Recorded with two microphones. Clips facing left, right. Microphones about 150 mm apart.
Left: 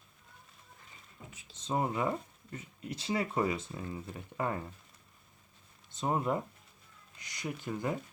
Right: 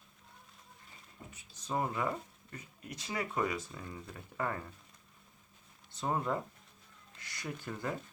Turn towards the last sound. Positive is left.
turn(degrees=20)  # may be behind; listen again after turning